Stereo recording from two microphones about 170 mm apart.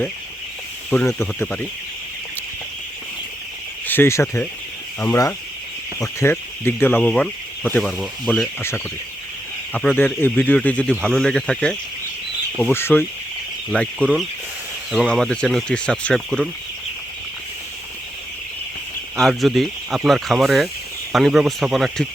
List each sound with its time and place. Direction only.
0.9 s speech: 10° left (ahead or behind)
3.8 s speech: 15° left (ahead or behind)
9.7 s speech: 10° left (ahead or behind)
19.1 s speech: centre (ahead or behind)